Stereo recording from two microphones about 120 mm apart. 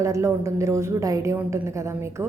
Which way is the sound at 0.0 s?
25° right (ahead or behind).